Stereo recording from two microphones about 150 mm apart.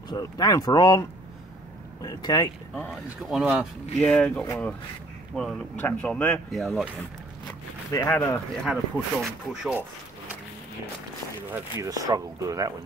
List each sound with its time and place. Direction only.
0.1 s speech: 25° left (ahead or behind)
2.7 s speech: 5° left (ahead or behind)
4.0 s speech: 5° left (ahead or behind)
7.9 s speech: 15° left (ahead or behind)
8.6 s speech: centre (ahead or behind)
11.5 s speech: 25° right (ahead or behind)